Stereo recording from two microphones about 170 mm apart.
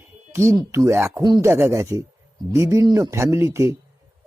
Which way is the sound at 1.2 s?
20° right (ahead or behind).